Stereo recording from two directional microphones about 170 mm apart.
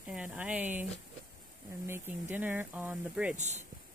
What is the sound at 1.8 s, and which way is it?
Speech, 15° right (ahead or behind).